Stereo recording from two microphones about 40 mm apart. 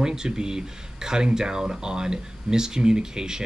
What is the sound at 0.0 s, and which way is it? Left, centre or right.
Speech, centre.